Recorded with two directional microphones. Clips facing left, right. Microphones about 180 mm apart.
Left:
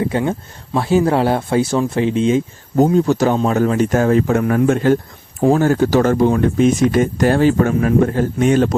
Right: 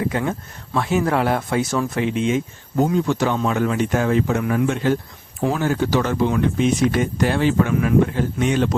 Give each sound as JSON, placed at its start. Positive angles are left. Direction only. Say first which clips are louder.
{"t": 0.0, "sound": "speech", "louder": "left 4 dB", "side_deg": 30}